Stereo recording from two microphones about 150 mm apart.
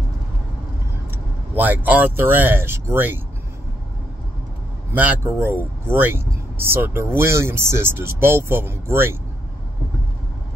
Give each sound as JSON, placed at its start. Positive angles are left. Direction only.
{"t": 1.1, "sound": "speech", "side_deg": -10}
{"t": 4.9, "sound": "speech", "side_deg": -10}